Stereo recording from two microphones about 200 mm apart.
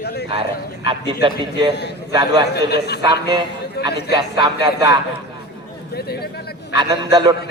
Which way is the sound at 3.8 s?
55° left (ahead or behind).